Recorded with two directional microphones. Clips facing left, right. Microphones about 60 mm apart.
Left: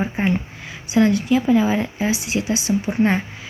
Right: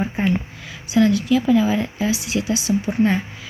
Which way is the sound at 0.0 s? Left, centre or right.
Left.